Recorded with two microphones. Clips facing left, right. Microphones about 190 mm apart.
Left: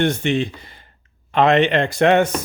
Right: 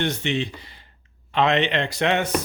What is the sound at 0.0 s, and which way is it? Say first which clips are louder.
Speech: left 6 dB; 50° left (ahead or behind).